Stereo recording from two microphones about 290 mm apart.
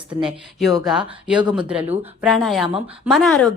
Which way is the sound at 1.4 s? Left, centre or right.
Centre.